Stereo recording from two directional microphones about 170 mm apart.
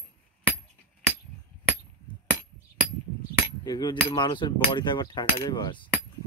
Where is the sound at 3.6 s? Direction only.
25° left (ahead or behind).